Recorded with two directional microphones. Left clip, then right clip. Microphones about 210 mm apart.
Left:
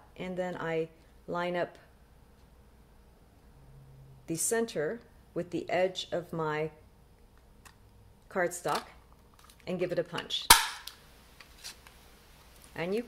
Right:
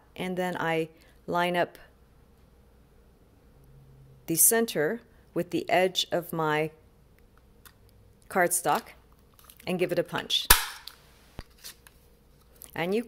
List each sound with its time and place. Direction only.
0.1 s speech: 35° right (ahead or behind)
4.3 s speech: 40° right (ahead or behind)
8.3 s speech: 35° right (ahead or behind)
12.7 s speech: 35° right (ahead or behind)